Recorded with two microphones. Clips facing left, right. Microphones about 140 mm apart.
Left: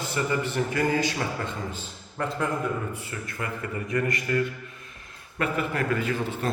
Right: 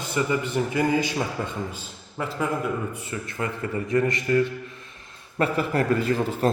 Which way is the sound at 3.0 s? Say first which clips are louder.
Right 4 dB; 25° right (ahead or behind).